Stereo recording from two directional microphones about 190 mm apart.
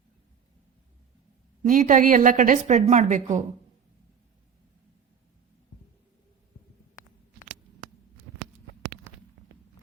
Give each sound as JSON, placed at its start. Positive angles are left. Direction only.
{"t": 1.6, "sound": "a woman's voice", "side_deg": -45}